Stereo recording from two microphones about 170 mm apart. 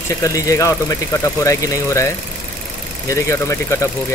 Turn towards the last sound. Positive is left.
turn(degrees=15)  # may be behind; listen again after turning